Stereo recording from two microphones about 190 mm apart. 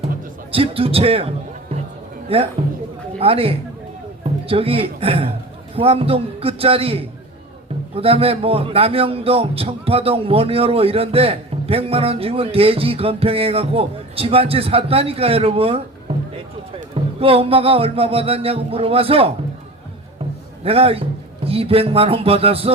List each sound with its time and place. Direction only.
0.5 s a man's voice: 30° right (ahead or behind)
2.3 s a man's voice: 30° right (ahead or behind)
16.9 s a man's voice: 30° right (ahead or behind)
20.7 s a man's voice: 30° right (ahead or behind)